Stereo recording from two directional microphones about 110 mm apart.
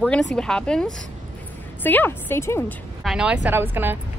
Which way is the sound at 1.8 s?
15° left (ahead or behind).